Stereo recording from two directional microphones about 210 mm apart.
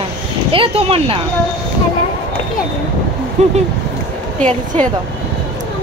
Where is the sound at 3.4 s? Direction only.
35° right (ahead or behind).